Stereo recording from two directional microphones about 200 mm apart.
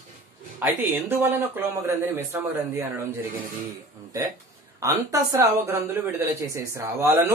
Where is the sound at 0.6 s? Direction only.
10° right (ahead or behind).